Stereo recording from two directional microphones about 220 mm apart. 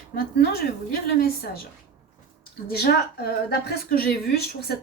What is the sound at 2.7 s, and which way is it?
Speech, 45° left (ahead or behind).